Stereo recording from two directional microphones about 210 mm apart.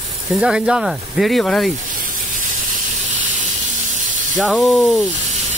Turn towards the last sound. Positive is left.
turn(degrees=0)  # may be behind; listen again after turning